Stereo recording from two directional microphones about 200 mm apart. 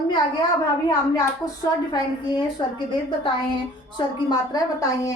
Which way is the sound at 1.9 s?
20° left (ahead or behind).